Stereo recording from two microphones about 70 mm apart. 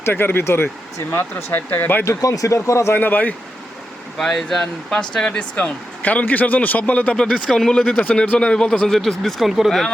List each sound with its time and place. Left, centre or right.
0.0 s speech: left
2.0 s speech: left
2.9 s speech: left
4.2 s speech: centre